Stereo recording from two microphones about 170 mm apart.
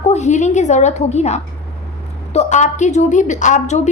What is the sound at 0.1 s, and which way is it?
A woman's voice, 45° left (ahead or behind).